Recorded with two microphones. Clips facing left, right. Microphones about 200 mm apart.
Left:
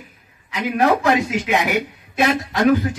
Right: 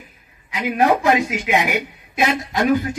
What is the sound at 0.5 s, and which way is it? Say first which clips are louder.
Speech: even; 10° right (ahead or behind).